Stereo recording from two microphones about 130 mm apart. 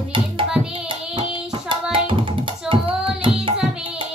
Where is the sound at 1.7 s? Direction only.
40° right (ahead or behind).